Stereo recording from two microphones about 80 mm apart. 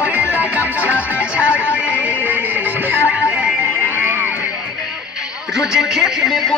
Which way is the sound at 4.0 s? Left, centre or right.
Right.